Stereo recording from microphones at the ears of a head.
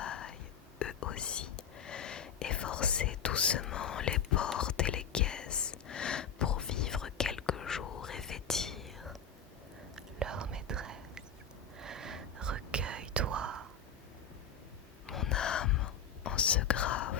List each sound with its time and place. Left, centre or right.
0.0 s whispering: left
10.2 s whispering: right
15.1 s whispering: left